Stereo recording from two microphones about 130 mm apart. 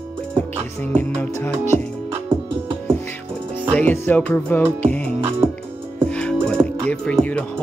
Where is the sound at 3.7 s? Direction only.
15° left (ahead or behind).